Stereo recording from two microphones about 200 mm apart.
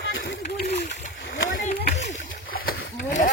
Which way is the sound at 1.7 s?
50° left (ahead or behind).